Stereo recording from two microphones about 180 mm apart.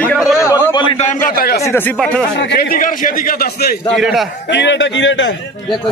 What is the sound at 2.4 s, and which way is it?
A man's voice, 65° left (ahead or behind).